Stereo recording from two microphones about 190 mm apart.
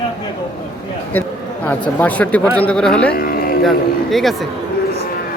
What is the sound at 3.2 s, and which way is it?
Music, 50° left (ahead or behind).